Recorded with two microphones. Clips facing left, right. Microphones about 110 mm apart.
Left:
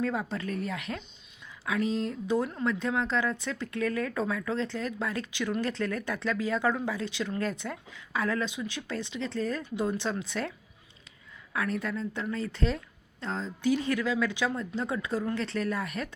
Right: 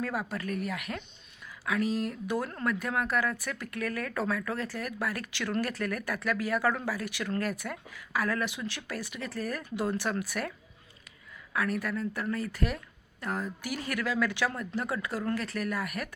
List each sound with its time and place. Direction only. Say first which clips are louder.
0.0 s speech: left 2 dB; 25° left (ahead or behind)
11.5 s speech: even; 25° left (ahead or behind)